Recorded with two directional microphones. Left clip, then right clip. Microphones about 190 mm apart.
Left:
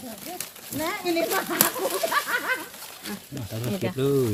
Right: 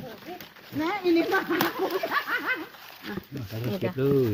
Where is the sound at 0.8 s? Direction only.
50° right (ahead or behind).